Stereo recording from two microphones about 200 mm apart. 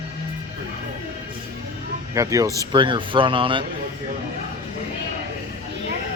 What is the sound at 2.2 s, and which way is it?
Speech, 15° right (ahead or behind).